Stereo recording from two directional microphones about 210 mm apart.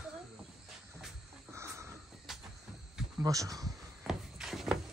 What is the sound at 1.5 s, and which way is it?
Sniff, 15° right (ahead or behind).